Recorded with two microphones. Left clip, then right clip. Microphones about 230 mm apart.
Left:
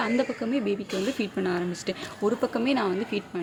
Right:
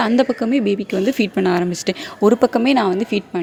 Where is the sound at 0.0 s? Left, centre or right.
Right.